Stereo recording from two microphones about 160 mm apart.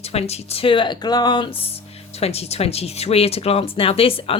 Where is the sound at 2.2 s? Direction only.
40° left (ahead or behind).